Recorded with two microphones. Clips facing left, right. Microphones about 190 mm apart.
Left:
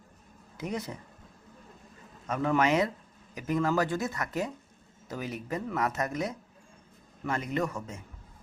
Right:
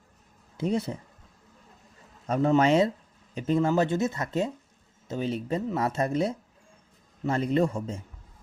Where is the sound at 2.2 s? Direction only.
30° right (ahead or behind).